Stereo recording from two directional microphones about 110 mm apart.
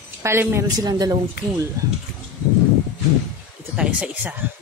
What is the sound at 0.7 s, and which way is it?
Speech, 35° right (ahead or behind).